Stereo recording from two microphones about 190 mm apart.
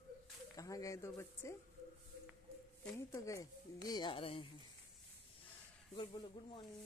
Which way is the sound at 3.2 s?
15° left (ahead or behind).